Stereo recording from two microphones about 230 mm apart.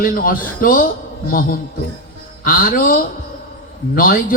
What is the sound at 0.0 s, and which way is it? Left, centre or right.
A man's voice, left.